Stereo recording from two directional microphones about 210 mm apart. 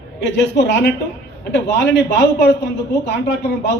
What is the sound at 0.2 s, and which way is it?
Speech, 55° left (ahead or behind).